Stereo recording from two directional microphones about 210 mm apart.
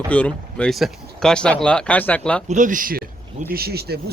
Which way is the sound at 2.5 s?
40° right (ahead or behind).